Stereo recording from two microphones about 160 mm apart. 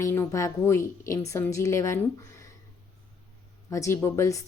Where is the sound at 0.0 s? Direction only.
20° left (ahead or behind).